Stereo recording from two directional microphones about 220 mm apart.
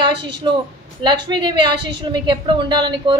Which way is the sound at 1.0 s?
20° right (ahead or behind).